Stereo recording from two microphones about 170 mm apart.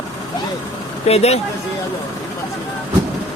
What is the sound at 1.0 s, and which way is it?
Speech, 40° left (ahead or behind).